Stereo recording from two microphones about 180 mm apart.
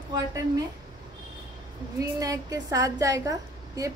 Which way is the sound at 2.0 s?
20° right (ahead or behind).